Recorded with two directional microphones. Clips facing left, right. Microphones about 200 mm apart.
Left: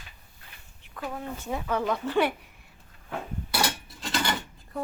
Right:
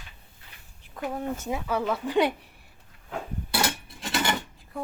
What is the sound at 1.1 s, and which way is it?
Speech, 40° right (ahead or behind).